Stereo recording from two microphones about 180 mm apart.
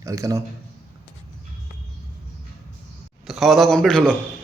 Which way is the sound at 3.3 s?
Centre (ahead or behind).